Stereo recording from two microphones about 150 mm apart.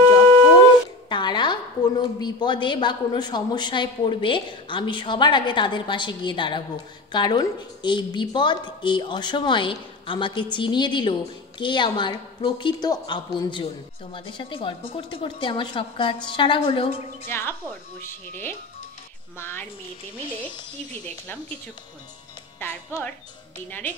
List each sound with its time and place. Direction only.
1.0 s a woman's voice: 30° left (ahead or behind)
17.3 s a woman's voice: 15° left (ahead or behind)
21.0 s a woman's voice: 10° left (ahead or behind)
22.6 s a woman's voice: 10° left (ahead or behind)